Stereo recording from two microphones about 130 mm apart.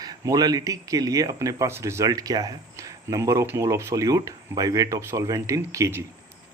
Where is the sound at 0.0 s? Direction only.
30° right (ahead or behind).